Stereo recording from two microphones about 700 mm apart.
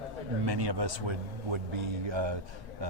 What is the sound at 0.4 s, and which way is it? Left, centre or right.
Speech, right.